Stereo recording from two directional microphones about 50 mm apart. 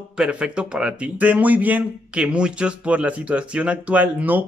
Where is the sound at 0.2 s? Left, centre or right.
Right.